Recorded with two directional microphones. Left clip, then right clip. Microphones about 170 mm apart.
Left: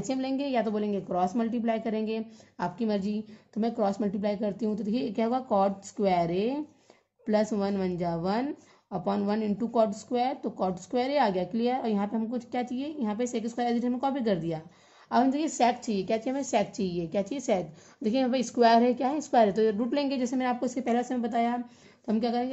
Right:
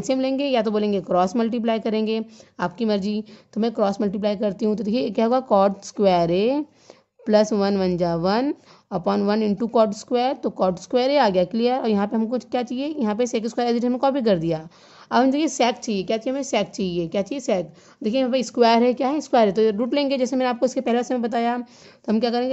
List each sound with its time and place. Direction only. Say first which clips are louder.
0.0 s a woman's voice: right 9 dB; 40° right (ahead or behind)